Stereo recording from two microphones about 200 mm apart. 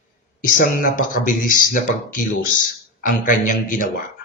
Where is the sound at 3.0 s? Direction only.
45° left (ahead or behind).